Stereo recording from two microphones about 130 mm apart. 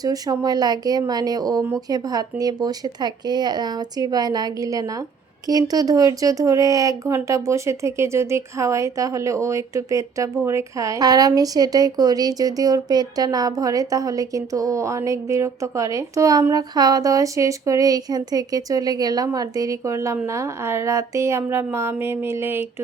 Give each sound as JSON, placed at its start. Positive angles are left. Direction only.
{"t": 0.0, "sound": "a woman's voice", "side_deg": -30}